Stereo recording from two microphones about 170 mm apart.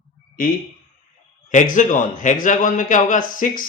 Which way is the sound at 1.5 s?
45° left (ahead or behind).